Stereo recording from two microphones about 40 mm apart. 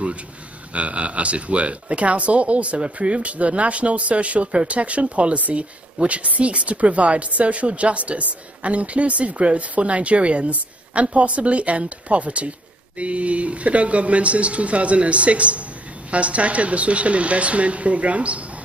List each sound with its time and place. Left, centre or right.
0.7 s speech: right